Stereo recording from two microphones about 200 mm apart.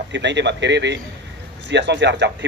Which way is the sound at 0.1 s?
60° right (ahead or behind).